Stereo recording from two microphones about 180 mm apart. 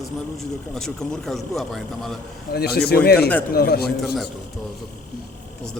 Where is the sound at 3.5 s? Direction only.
60° left (ahead or behind).